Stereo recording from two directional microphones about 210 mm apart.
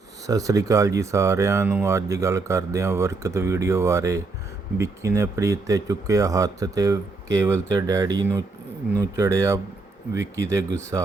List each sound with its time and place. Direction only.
0.3 s speech: 15° right (ahead or behind)